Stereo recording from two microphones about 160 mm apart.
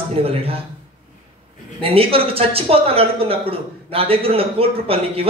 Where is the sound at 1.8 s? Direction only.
35° right (ahead or behind).